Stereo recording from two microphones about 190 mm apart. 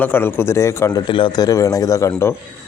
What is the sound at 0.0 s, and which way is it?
A man's voice, 10° left (ahead or behind).